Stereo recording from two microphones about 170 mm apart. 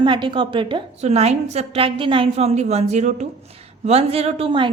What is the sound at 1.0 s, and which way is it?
A woman's voice, 40° right (ahead or behind).